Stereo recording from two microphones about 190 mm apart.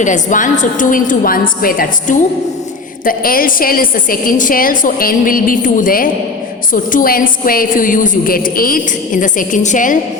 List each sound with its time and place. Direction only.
0.0 s a woman's voice: 40° left (ahead or behind)